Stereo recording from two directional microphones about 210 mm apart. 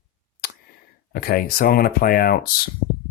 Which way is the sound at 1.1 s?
45° left (ahead or behind).